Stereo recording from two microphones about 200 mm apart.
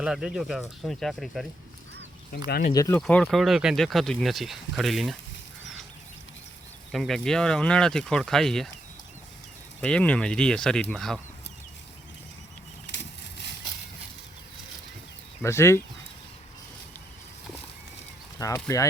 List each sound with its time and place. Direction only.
0.0 s speech: 5° right (ahead or behind)
2.7 s speech: 15° left (ahead or behind)
3.0 s speech: 5° left (ahead or behind)
6.9 s speech: centre (ahead or behind)
9.8 s speech: 5° left (ahead or behind)
15.4 s speech: 15° left (ahead or behind)
18.3 s speech: 15° left (ahead or behind)